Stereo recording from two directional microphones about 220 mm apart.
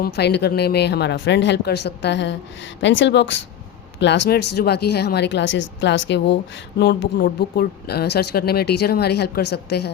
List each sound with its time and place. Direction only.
0.0 s speech: 50° left (ahead or behind)